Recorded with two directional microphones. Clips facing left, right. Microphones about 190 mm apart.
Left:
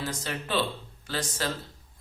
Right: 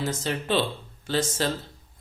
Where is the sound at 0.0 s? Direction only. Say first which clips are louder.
Right 5 dB; 25° right (ahead or behind).